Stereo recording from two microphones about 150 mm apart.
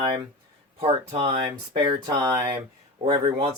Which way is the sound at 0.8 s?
40° right (ahead or behind).